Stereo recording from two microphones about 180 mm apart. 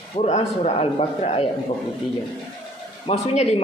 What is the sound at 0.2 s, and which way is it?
A man's voice, 40° left (ahead or behind).